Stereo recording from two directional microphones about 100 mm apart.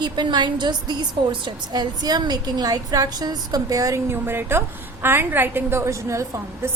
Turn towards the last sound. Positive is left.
turn(degrees=-30)  # may be behind; listen again after turning